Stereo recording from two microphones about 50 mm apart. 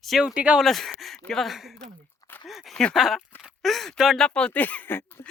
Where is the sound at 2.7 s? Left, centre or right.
Centre.